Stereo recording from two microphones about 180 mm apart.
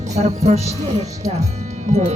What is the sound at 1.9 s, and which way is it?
Speech, 40° right (ahead or behind).